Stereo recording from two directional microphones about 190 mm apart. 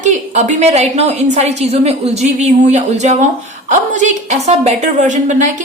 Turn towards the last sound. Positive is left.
turn(degrees=-40)  # may be behind; listen again after turning